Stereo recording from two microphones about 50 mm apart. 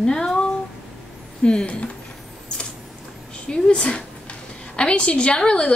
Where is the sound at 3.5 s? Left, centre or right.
Left.